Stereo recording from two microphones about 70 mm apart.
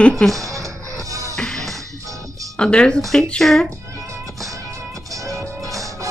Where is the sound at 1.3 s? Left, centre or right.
Centre.